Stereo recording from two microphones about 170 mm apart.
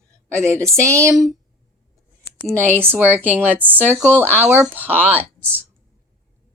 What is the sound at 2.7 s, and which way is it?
Speech, 10° right (ahead or behind).